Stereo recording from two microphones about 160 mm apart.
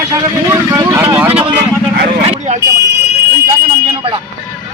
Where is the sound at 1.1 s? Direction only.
10° right (ahead or behind).